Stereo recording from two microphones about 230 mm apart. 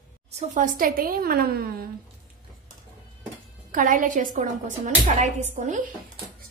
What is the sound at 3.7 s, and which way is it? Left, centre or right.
A woman's voice, right.